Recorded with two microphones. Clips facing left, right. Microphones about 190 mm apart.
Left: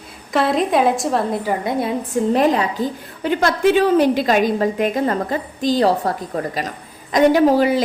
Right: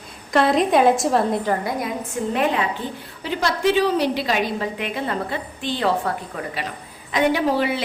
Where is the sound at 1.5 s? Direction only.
20° left (ahead or behind); by 7.8 s 40° left (ahead or behind).